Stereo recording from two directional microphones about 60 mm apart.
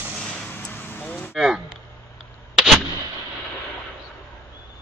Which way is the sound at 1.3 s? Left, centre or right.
Centre.